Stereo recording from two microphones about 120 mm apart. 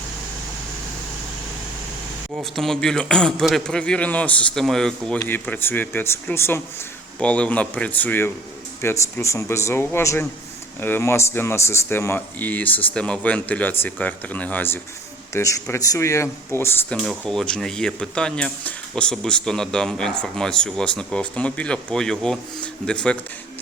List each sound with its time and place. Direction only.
2.3 s speech: 5° left (ahead or behind)
5.3 s speech: 15° left (ahead or behind)
15.3 s speech: 25° left (ahead or behind)
17.0 s speech: centre (ahead or behind)